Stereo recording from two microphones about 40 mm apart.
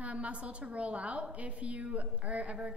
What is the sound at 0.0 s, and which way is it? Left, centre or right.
A woman's voice, right.